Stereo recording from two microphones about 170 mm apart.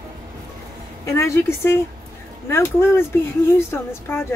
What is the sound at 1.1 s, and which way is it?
Speech, 15° left (ahead or behind).